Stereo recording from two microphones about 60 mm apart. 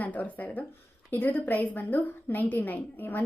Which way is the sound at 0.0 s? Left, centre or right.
Left.